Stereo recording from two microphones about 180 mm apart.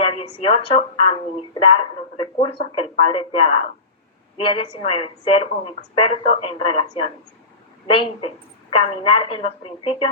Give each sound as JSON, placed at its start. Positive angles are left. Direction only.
{"t": 0.0, "sound": "a woman's voice", "side_deg": 30}